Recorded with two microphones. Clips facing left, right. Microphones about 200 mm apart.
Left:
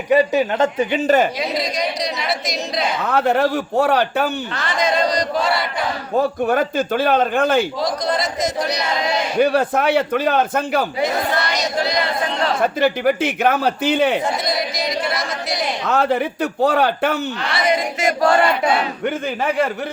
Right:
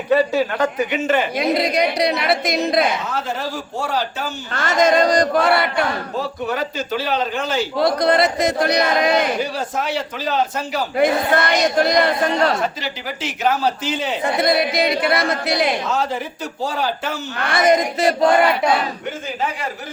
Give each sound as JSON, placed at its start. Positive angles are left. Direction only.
{"t": 0.1, "sound": "speech", "side_deg": 15}
{"t": 0.9, "sound": "speech", "side_deg": 35}
{"t": 1.4, "sound": "a woman's voice", "side_deg": -60}
{"t": 3.0, "sound": "speech", "side_deg": 60}
{"t": 4.5, "sound": "speech", "side_deg": -45}
{"t": 6.1, "sound": "a man's voice", "side_deg": 50}
{"t": 7.8, "sound": "a woman's voice", "side_deg": -60}
{"t": 9.4, "sound": "speech", "side_deg": 60}
{"t": 10.9, "sound": "speech", "side_deg": -55}
{"t": 12.6, "sound": "speech", "side_deg": 55}
{"t": 14.3, "sound": "a woman's voice", "side_deg": -60}
{"t": 15.9, "sound": "speech", "side_deg": 60}
{"t": 17.4, "sound": "speech", "side_deg": -45}
{"t": 19.0, "sound": "speech", "side_deg": 60}